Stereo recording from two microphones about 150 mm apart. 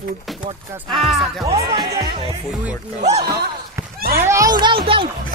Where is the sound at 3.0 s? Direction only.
45° right (ahead or behind).